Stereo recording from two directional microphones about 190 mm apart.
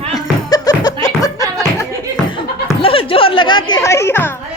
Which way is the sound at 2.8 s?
30° left (ahead or behind).